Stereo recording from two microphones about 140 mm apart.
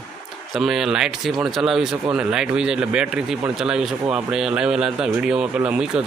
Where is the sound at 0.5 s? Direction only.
5° right (ahead or behind).